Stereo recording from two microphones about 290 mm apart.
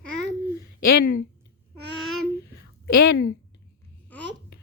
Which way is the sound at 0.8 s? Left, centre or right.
Left.